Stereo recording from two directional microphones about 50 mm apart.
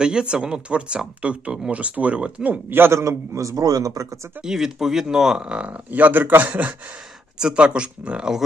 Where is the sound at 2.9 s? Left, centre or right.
Right.